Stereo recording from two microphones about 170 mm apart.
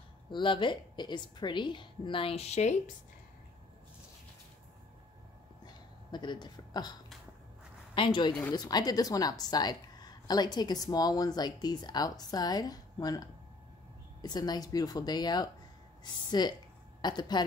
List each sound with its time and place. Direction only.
0.3 s a woman's voice: 30° left (ahead or behind)
6.1 s a woman's voice: 25° left (ahead or behind)
14.2 s a woman's voice: 25° left (ahead or behind)